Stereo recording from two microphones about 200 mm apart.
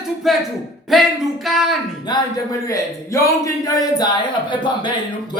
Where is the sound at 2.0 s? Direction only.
20° left (ahead or behind).